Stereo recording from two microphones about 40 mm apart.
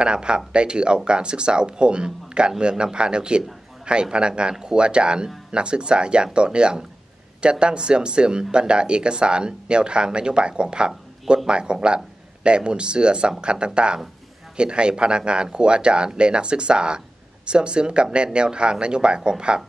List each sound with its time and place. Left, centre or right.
0.0 s speech: right